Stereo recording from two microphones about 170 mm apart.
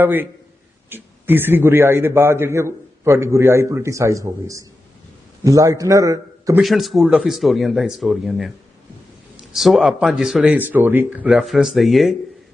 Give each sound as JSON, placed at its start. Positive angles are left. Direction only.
{"t": 0.0, "sound": "a man's voice", "side_deg": -10}
{"t": 6.6, "sound": "speech", "side_deg": 0}